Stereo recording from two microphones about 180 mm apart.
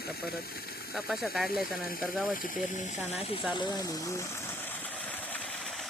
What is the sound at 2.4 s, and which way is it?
Speech, 50° left (ahead or behind).